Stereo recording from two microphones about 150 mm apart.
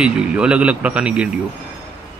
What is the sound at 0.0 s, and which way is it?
Speech, 5° right (ahead or behind).